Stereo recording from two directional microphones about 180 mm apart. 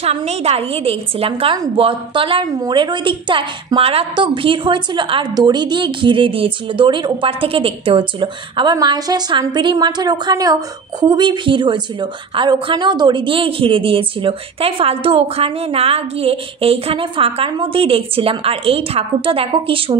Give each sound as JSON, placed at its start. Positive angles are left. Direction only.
{"t": 0.0, "sound": "a woman's voice", "side_deg": -35}